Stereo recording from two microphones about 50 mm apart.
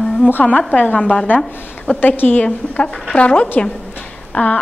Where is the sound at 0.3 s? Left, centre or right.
Left.